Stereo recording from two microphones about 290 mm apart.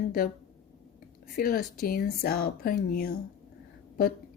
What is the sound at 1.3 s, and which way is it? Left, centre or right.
Speech, left.